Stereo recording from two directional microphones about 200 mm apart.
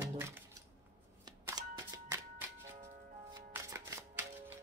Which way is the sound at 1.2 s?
20° right (ahead or behind).